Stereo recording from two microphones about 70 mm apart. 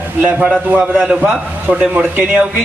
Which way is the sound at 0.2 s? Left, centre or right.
Right.